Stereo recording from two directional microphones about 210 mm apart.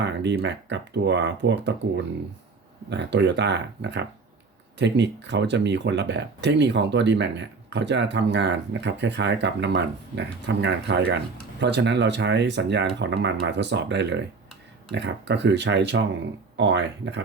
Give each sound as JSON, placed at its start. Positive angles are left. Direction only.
{"t": 0.0, "sound": "speech", "side_deg": -55}
{"t": 2.9, "sound": "speech", "side_deg": -55}